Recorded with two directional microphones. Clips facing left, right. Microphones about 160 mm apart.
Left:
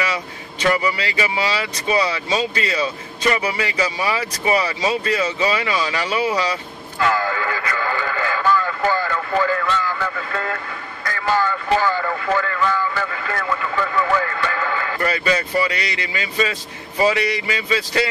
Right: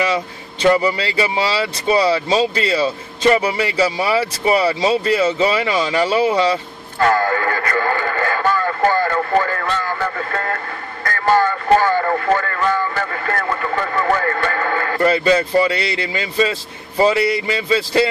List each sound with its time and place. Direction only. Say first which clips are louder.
0.1 s speech: right 6 dB; 30° right (ahead or behind)
7.0 s radio: right 4 dB; 50° right (ahead or behind)
11.1 s speech: right 4 dB; 50° right (ahead or behind)
15.0 s speech: right 7 dB; 30° right (ahead or behind)